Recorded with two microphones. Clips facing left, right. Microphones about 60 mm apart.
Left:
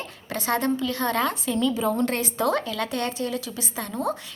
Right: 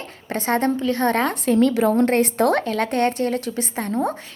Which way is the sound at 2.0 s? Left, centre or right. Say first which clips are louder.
Right 7 dB; right.